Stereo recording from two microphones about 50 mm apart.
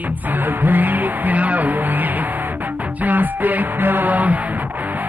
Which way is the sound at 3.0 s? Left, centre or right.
Right.